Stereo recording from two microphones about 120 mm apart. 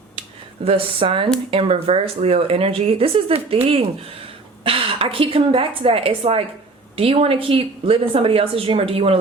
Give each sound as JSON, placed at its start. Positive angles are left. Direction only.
{"t": 0.6, "sound": "speech", "side_deg": -50}